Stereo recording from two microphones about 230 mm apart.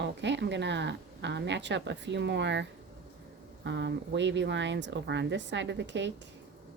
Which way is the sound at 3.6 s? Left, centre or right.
Right.